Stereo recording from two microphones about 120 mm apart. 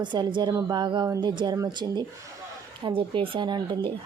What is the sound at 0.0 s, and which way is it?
Speech, 40° right (ahead or behind).